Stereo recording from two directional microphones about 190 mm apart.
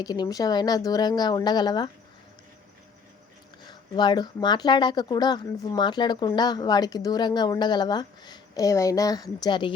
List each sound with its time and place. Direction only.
0.0 s speech: 20° left (ahead or behind)
3.6 s speech: 20° left (ahead or behind)